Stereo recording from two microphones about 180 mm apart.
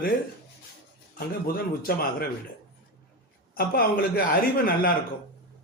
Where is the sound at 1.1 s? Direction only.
55° left (ahead or behind).